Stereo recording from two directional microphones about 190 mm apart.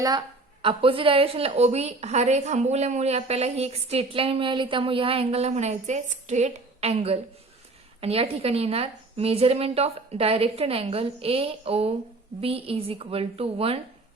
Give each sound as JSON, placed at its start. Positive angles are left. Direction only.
{"t": 0.6, "sound": "a woman's voice", "side_deg": -30}